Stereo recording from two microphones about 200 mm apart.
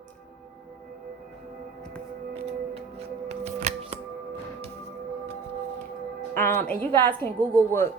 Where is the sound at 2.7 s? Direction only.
30° right (ahead or behind).